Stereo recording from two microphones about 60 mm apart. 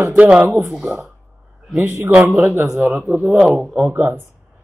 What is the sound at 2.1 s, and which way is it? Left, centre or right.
Speech, right.